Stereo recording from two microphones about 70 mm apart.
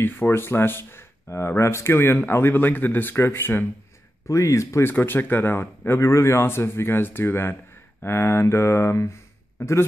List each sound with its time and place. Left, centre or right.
0.0 s speech: left
4.3 s speech: left
4.9 s a man's voice: left